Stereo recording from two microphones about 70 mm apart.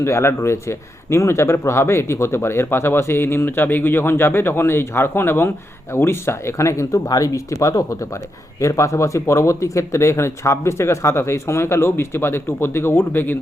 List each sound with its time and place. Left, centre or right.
0.0 s a man's voice: left